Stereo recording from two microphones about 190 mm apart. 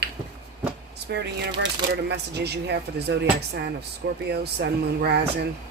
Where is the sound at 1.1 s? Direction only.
60° right (ahead or behind).